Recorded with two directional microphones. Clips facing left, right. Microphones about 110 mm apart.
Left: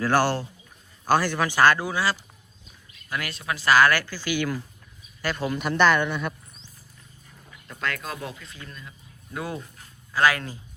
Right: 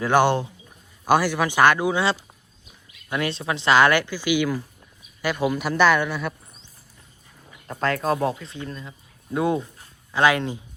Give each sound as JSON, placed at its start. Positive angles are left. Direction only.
{"t": 0.0, "sound": "a man's voice", "side_deg": -20}
{"t": 7.7, "sound": "speech", "side_deg": -35}